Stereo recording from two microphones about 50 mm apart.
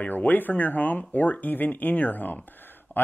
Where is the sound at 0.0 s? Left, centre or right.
Left.